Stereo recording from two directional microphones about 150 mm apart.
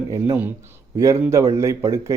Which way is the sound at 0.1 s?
15° right (ahead or behind).